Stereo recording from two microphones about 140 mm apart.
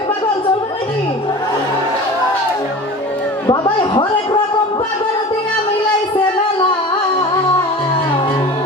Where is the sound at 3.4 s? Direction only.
35° left (ahead or behind).